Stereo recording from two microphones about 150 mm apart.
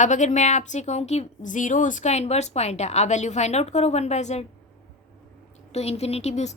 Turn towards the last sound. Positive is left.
turn(degrees=45)  # may be behind; listen again after turning